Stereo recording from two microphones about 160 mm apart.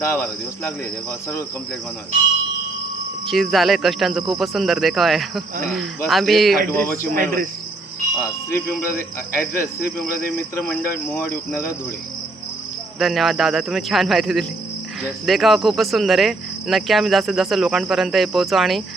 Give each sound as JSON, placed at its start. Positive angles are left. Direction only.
{"t": 0.0, "sound": "cricket", "side_deg": 15}
{"t": 3.2, "sound": "cricket", "side_deg": 0}
{"t": 6.7, "sound": "cricket", "side_deg": 15}
{"t": 7.1, "sound": "cricket", "side_deg": -65}
{"t": 8.9, "sound": "cricket", "side_deg": 60}
{"t": 10.5, "sound": "cricket", "side_deg": 15}
{"t": 13.0, "sound": "cricket", "side_deg": 0}